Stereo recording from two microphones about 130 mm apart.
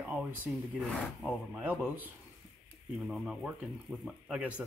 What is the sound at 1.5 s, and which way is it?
Speech, 15° right (ahead or behind).